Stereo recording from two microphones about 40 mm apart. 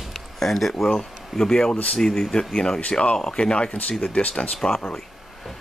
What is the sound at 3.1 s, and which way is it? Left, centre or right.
Speech, centre.